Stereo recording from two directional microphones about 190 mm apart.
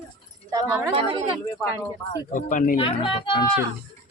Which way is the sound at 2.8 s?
30° left (ahead or behind).